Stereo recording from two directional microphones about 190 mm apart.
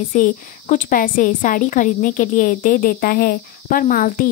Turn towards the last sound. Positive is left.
turn(degrees=45)  # may be behind; listen again after turning